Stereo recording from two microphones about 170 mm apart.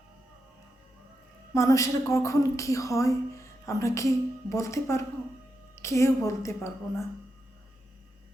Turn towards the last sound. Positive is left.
turn(degrees=15)  # may be behind; listen again after turning